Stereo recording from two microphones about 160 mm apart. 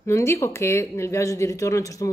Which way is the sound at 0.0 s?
15° left (ahead or behind).